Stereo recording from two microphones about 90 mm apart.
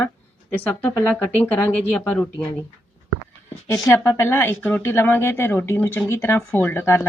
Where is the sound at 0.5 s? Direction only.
20° left (ahead or behind).